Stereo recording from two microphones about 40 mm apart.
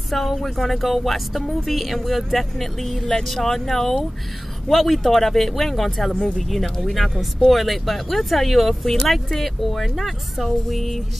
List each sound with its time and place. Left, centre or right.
0.1 s speech: centre
6.1 s speech: centre
6.5 s speech: centre